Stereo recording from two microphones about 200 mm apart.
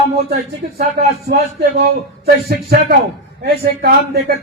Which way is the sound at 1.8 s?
55° right (ahead or behind).